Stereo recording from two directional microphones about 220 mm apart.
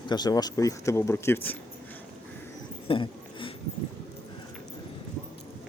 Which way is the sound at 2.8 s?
25° left (ahead or behind).